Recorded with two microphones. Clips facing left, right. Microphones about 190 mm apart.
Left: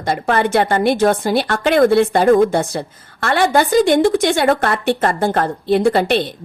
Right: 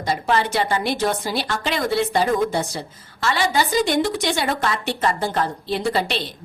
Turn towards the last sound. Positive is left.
turn(degrees=55)  # may be behind; listen again after turning